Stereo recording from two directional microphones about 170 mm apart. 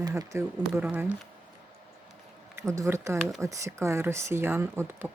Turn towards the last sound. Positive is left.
turn(degrees=-15)  # may be behind; listen again after turning